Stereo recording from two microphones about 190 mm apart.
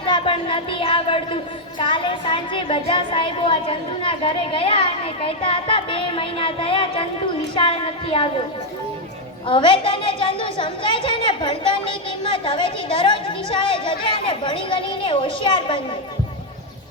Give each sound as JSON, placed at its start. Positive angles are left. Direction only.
{"t": 0.0, "sound": "a woman's voice", "side_deg": 25}
{"t": 9.5, "sound": "a woman's voice", "side_deg": 25}